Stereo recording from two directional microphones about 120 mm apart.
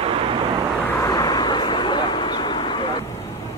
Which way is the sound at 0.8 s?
20° left (ahead or behind).